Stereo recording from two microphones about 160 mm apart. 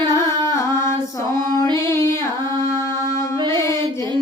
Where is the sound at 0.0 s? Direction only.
25° right (ahead or behind).